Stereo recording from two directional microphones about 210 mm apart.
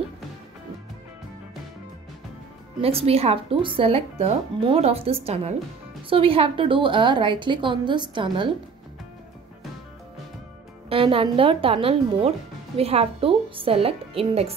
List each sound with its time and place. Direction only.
2.8 s speech: 30° right (ahead or behind)
10.9 s speech: 25° right (ahead or behind)